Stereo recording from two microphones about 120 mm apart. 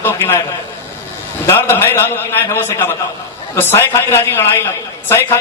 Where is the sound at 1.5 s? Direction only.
20° left (ahead or behind).